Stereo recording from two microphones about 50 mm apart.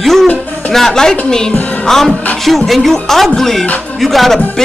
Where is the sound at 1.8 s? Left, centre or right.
Centre.